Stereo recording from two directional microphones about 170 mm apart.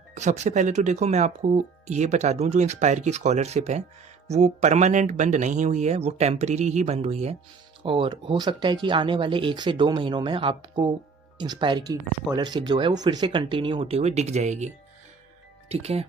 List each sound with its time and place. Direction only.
0.1 s speech: 45° right (ahead or behind)
15.7 s speech: 35° right (ahead or behind)